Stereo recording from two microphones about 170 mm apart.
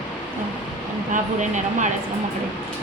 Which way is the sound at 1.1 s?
45° right (ahead or behind).